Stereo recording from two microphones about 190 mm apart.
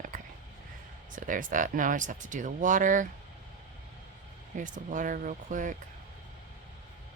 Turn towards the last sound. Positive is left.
turn(degrees=-40)  # may be behind; listen again after turning